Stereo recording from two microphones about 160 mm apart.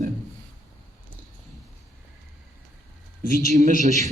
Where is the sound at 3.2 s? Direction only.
50° right (ahead or behind).